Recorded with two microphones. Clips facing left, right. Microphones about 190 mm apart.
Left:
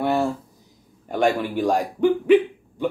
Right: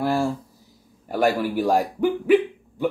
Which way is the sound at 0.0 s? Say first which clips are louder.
Left 1 dB; centre (ahead or behind).